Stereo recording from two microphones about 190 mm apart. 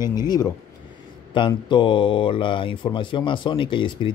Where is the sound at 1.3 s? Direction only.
25° left (ahead or behind).